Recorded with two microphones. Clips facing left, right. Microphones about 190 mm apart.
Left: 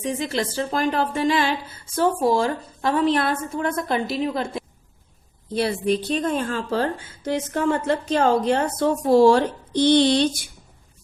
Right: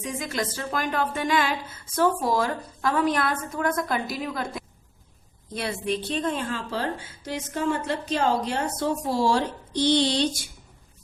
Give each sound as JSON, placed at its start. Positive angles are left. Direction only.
{"t": 0.0, "sound": "a woman's voice", "side_deg": 30}